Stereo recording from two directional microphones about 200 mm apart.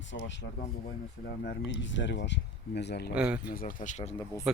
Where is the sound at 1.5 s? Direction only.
65° left (ahead or behind).